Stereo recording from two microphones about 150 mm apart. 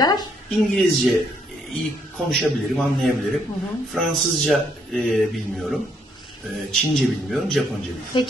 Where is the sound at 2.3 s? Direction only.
Centre (ahead or behind).